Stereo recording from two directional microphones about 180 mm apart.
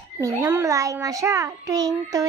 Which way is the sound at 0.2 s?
20° right (ahead or behind).